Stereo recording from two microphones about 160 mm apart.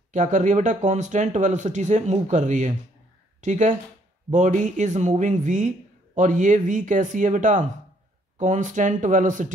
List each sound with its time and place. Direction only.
0.1 s speech: 50° right (ahead or behind)